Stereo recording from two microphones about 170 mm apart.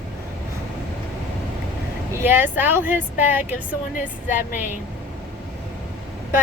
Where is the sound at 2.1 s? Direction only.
10° right (ahead or behind).